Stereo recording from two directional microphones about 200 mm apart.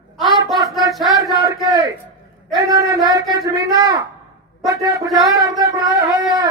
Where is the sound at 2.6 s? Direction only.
15° right (ahead or behind).